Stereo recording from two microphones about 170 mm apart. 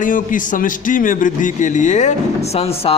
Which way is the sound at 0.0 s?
50° left (ahead or behind).